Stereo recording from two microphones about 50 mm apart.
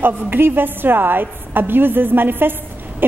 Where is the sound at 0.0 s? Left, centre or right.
Right.